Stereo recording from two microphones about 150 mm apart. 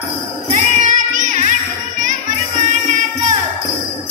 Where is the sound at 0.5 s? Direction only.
55° right (ahead or behind).